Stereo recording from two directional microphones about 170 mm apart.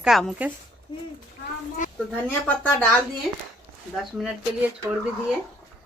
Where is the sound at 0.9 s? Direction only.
25° left (ahead or behind).